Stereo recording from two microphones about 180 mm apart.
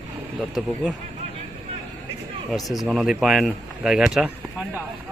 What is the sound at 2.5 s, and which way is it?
Speech, centre (ahead or behind).